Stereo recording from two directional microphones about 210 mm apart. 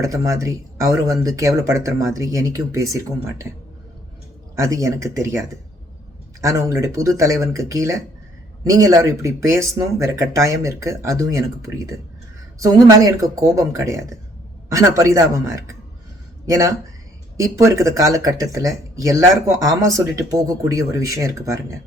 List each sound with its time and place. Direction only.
0.0 s speech: 15° right (ahead or behind)
4.5 s speech: 15° right (ahead or behind)
6.4 s speech: 15° right (ahead or behind)